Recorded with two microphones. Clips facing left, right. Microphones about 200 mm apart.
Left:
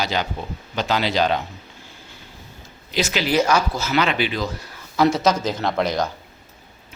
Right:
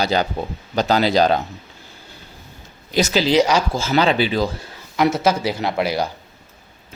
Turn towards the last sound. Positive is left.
turn(degrees=-10)  # may be behind; listen again after turning